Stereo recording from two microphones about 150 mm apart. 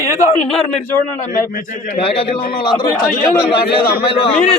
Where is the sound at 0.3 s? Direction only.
40° left (ahead or behind).